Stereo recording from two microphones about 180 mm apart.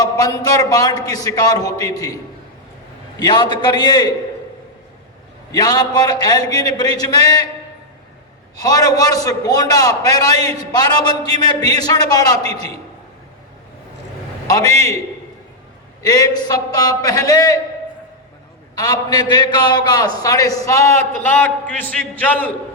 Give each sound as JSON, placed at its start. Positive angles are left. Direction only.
{"t": 0.0, "sound": "a man's voice", "side_deg": 20}
{"t": 3.2, "sound": "a man's voice", "side_deg": 25}
{"t": 5.5, "sound": "a man's voice", "side_deg": 20}
{"t": 8.5, "sound": "a man's voice", "side_deg": 20}
{"t": 14.4, "sound": "a man's voice", "side_deg": 20}
{"t": 16.0, "sound": "a man's voice", "side_deg": 20}
{"t": 18.8, "sound": "a man's voice", "side_deg": 20}